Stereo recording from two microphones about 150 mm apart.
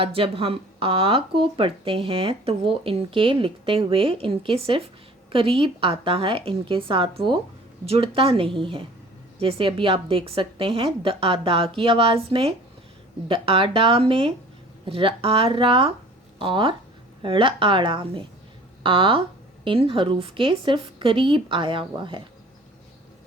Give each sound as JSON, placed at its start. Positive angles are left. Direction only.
{"t": 0.0, "sound": "speech", "side_deg": -40}